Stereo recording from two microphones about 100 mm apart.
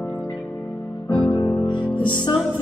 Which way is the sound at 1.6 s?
50° left (ahead or behind).